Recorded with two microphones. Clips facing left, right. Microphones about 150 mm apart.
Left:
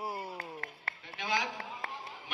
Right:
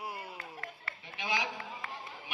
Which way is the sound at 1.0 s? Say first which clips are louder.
Left 1 dB; 15° right (ahead or behind).